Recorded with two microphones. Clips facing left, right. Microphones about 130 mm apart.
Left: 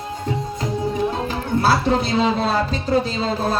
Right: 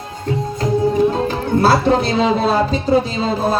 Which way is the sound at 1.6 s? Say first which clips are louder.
Right 4 dB; 5° left (ahead or behind).